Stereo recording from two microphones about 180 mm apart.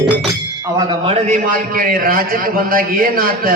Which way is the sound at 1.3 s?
50° right (ahead or behind).